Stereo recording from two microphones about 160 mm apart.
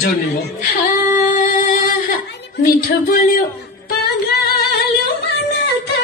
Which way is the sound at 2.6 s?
65° left (ahead or behind).